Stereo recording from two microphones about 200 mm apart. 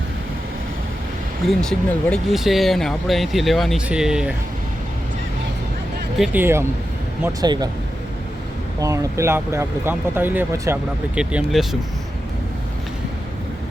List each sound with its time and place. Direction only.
1.5 s speech: centre (ahead or behind)
6.1 s speech: 5° right (ahead or behind); by 7.7 s 20° right (ahead or behind)
8.8 s speech: 15° right (ahead or behind)